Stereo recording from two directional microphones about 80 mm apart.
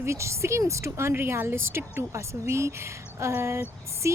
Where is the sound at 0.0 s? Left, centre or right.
Right.